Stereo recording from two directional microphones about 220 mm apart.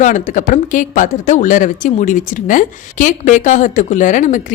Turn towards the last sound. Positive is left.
turn(degrees=35)  # may be behind; listen again after turning